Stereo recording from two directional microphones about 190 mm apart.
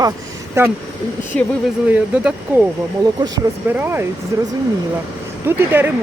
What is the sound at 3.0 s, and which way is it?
Speech, 20° right (ahead or behind).